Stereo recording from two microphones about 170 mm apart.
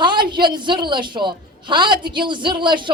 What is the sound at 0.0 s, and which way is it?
A man's voice, 25° right (ahead or behind).